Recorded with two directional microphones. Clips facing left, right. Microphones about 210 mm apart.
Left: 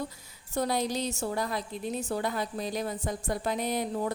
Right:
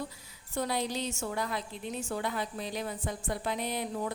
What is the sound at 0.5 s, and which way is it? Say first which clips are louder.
A woman's voice: left 3 dB; 40° left (ahead or behind).